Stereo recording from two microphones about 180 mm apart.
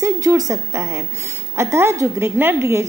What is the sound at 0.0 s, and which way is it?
A woman's voice, 20° right (ahead or behind).